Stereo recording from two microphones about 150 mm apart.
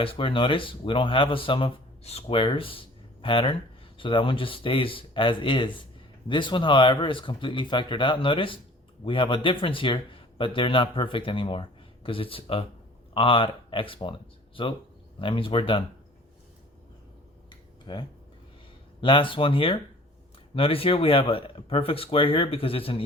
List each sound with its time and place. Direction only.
0.0 s speech: 35° left (ahead or behind)
17.9 s speech: 30° left (ahead or behind)